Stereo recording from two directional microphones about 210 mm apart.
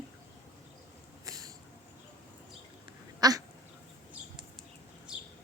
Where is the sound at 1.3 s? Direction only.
15° right (ahead or behind).